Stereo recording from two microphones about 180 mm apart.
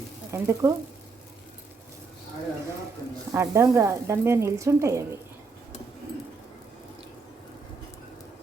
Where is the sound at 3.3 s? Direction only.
15° right (ahead or behind).